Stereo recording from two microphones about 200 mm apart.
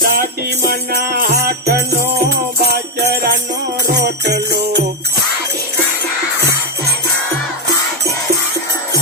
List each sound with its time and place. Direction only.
0.0 s music: 45° right (ahead or behind)
3.9 s jingle bell: 55° right (ahead or behind)